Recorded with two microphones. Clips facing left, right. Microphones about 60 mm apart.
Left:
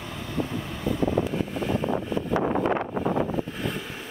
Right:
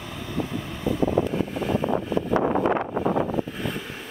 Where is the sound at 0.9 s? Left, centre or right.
Centre.